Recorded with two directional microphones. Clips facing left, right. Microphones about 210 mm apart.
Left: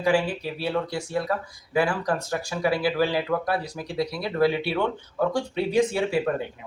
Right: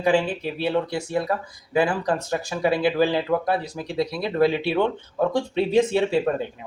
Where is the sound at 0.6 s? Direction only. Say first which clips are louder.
Right 4 dB; 20° right (ahead or behind).